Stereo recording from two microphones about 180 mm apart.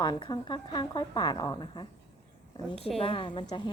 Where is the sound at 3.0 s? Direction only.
30° left (ahead or behind).